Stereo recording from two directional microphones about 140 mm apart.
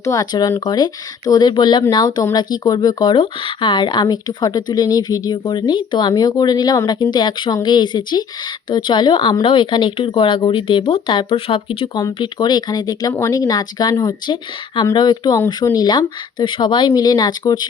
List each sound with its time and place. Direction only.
0.0 s speech: 25° left (ahead or behind)